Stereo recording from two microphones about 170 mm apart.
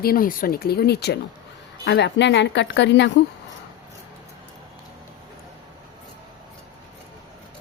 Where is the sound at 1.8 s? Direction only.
90° left.